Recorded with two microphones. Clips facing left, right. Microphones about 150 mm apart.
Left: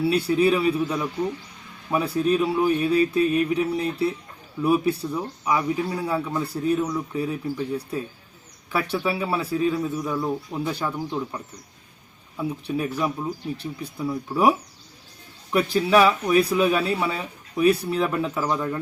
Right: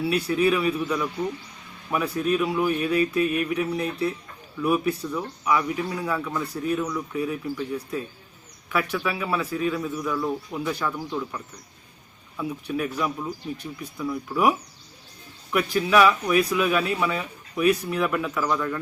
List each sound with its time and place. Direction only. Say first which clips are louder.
0.1 s speech: left 1 dB; 30° left (ahead or behind)
12.4 s speech: left 1 dB; 30° left (ahead or behind)
15.5 s speech: left 2 dB; 30° left (ahead or behind)